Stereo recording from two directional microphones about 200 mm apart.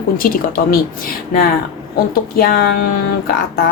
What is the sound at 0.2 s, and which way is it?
Speech, 45° left (ahead or behind).